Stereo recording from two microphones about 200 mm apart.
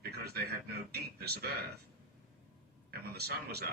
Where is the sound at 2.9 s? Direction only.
50° right (ahead or behind).